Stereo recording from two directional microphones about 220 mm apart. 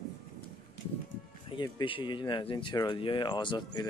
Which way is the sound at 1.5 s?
20° left (ahead or behind).